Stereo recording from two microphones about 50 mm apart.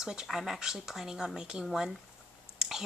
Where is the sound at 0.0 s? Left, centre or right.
Centre.